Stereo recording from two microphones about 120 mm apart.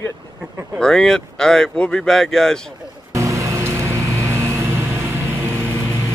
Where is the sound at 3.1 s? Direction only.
25° right (ahead or behind).